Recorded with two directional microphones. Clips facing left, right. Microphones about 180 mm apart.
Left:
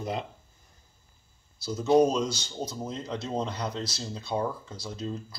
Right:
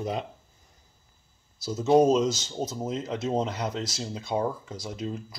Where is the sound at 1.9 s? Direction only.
20° right (ahead or behind).